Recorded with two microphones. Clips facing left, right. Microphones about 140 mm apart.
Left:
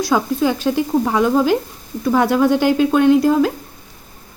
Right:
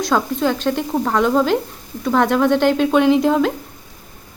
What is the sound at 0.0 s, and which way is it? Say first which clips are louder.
Speech: left 1 dB; 5° left (ahead or behind).